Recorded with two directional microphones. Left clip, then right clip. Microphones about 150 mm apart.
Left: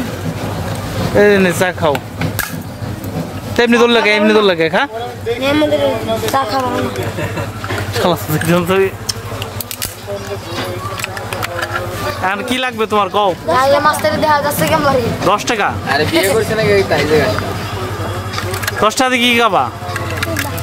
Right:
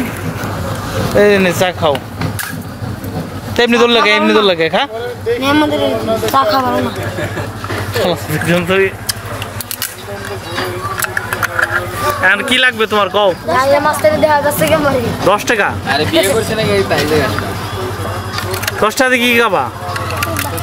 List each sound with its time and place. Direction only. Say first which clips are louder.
1.1 s speech: even; 20° left (ahead or behind)
3.5 s speech: right 1 dB; 20° left (ahead or behind)
5.4 s a man's voice: left 1 dB; 10° right (ahead or behind)
8.0 s speech: left 1 dB; 40° left (ahead or behind)
8.6 s speech: right 2 dB; 20° left (ahead or behind)
12.2 s speech: right 7 dB; 15° left (ahead or behind)
18.8 s speech: right 1 dB; 5° left (ahead or behind)